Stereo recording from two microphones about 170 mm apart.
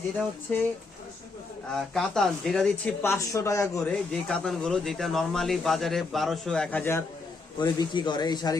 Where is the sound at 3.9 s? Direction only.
5° left (ahead or behind).